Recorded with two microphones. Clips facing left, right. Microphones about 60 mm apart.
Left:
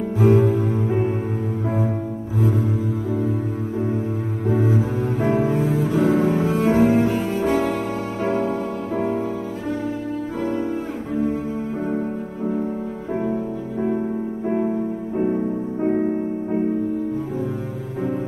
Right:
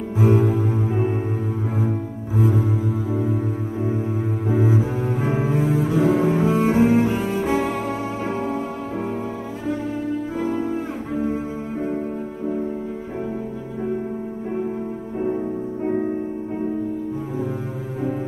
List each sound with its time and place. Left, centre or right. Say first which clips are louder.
0.2 s music: left 2 dB; centre
2.3 s cello: right 1 dB; centre
4.5 s cello: left 1 dB; centre
10.4 s cello: left 1 dB; centre